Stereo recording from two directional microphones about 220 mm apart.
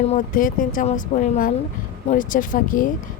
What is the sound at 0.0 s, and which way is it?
Speech, 35° left (ahead or behind).